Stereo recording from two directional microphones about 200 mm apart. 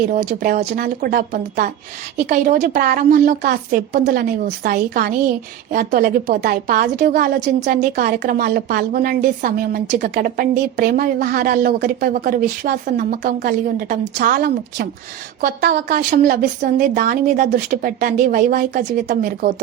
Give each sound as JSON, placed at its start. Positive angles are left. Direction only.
{"t": 0.1, "sound": "a woman's voice", "side_deg": -40}